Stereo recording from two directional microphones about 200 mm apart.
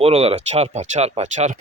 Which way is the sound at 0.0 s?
30° right (ahead or behind).